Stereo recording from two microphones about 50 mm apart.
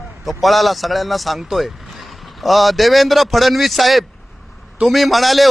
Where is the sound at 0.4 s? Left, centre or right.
Centre.